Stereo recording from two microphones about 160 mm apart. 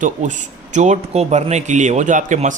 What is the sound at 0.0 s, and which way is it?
Speech, 50° right (ahead or behind).